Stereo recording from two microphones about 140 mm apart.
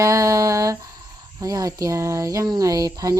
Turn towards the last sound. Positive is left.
turn(degrees=-25)  # may be behind; listen again after turning